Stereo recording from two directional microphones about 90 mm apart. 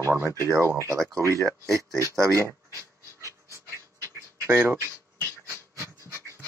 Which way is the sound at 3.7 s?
30° left (ahead or behind).